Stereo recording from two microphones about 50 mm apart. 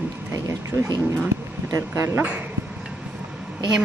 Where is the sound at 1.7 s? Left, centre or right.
Right.